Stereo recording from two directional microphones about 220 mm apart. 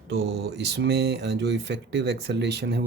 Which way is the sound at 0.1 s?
50° right (ahead or behind).